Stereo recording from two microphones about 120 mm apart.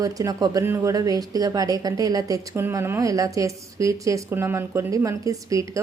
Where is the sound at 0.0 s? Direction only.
30° right (ahead or behind).